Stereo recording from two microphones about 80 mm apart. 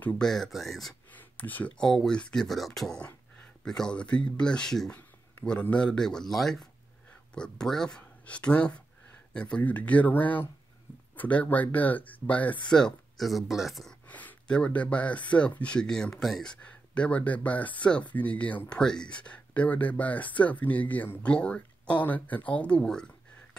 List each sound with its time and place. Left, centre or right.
0.2 s speech: centre
1.1 s a sound: left
1.8 s speech: centre
3.0 s speech: centre
12.6 s speech: centre
14.0 s speech: centre
16.6 s speech: centre